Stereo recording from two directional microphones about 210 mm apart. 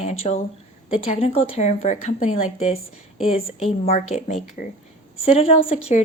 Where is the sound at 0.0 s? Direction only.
30° left (ahead or behind).